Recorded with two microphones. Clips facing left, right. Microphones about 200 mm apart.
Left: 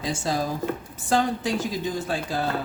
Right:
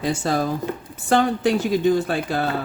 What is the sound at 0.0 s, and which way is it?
Speech, 60° right (ahead or behind).